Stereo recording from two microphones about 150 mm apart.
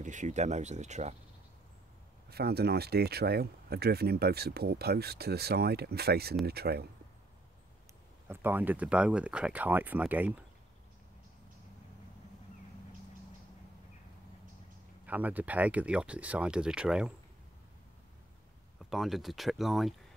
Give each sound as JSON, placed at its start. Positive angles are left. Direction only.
{"t": 0.0, "sound": "speech", "side_deg": -55}
{"t": 2.2, "sound": "speech", "side_deg": -90}
{"t": 8.3, "sound": "speech", "side_deg": -15}
{"t": 15.0, "sound": "speech", "side_deg": -10}
{"t": 18.9, "sound": "speech", "side_deg": 0}